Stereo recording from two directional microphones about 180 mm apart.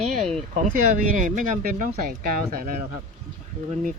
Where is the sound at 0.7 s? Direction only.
45° right (ahead or behind).